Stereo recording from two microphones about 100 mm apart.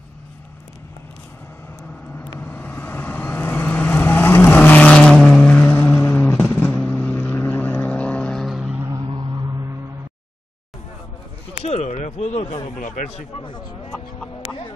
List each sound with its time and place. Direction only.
2.4 s vehicle: 20° left (ahead or behind)
8.5 s vehicle: 10° right (ahead or behind)
11.6 s a sound: 90° left